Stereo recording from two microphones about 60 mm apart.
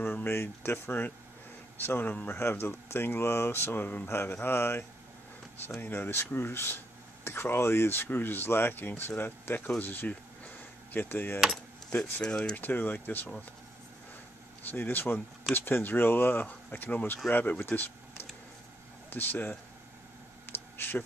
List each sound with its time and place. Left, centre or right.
0.0 s speech: left
2.3 s speech: left
9.8 s a sound: left
12.0 s speech: centre
12.5 s speech: left
14.6 s speech: left
19.0 s speech: left
20.7 s a sound: left